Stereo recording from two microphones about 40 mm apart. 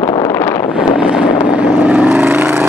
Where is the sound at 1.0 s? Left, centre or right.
Right.